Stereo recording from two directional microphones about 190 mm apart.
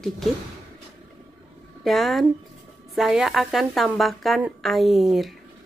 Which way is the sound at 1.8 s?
Centre (ahead or behind).